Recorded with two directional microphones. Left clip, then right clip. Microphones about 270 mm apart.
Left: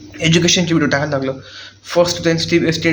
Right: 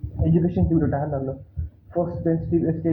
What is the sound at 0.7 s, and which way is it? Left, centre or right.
Speech, left.